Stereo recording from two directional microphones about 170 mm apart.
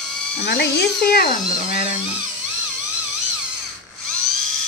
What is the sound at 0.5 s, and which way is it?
Speech, 70° left (ahead or behind).